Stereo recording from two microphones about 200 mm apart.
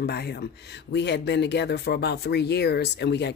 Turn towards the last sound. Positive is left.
turn(degrees=60)  # may be behind; listen again after turning